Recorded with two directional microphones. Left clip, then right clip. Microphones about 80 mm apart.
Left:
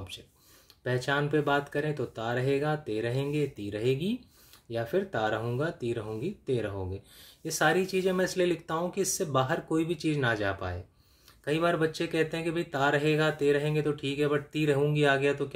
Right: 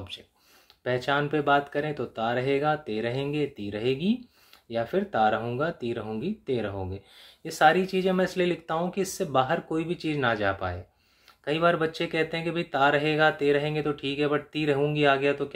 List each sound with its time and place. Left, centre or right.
0.8 s speech: left